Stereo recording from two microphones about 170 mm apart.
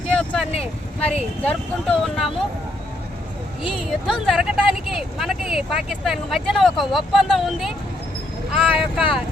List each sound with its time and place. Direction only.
0.1 s vehicle: 5° left (ahead or behind)
1.5 s speech: centre (ahead or behind)
3.6 s speech: 30° left (ahead or behind)
3.8 s speech: centre (ahead or behind)